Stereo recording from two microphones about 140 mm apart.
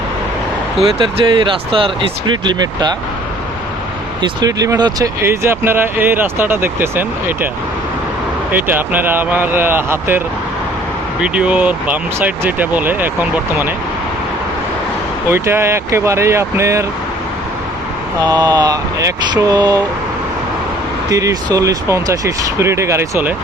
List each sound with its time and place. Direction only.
0.9 s speech: 35° right (ahead or behind)
4.2 s speech: 30° right (ahead or behind)
8.5 s speech: 15° right (ahead or behind)
15.3 s speech: 15° right (ahead or behind)
18.3 s speech: 30° right (ahead or behind)
21.1 s speech: 25° right (ahead or behind)